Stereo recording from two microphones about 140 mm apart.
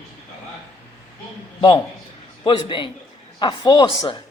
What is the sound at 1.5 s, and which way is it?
A man's voice, 35° left (ahead or behind).